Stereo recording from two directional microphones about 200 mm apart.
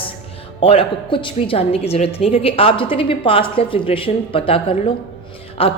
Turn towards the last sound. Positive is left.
turn(degrees=30)  # may be behind; listen again after turning